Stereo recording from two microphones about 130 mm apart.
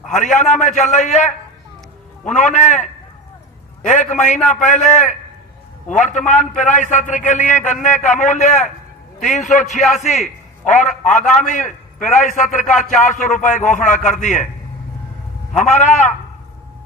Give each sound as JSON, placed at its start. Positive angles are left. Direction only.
{"t": 0.1, "sound": "a man's voice", "side_deg": 70}
{"t": 3.8, "sound": "a man's voice", "side_deg": 70}
{"t": 15.5, "sound": "a man's voice", "side_deg": 65}